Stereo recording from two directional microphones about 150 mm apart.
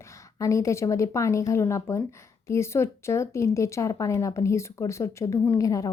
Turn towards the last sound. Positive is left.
turn(degrees=25)  # may be behind; listen again after turning